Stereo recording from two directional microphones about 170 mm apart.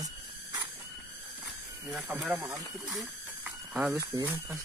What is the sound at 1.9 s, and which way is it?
Speech, centre (ahead or behind).